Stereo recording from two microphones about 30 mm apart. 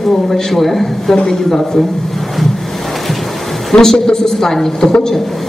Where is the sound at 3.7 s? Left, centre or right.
Centre.